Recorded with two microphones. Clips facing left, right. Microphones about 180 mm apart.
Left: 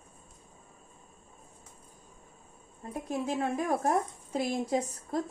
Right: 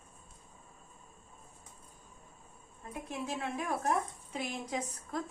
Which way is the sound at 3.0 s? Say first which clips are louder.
Left 7 dB; 40° left (ahead or behind).